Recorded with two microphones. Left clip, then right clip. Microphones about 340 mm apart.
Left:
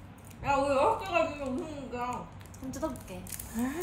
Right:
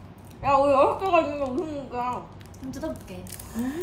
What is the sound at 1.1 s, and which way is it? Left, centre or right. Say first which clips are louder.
Speech: right 9 dB; centre.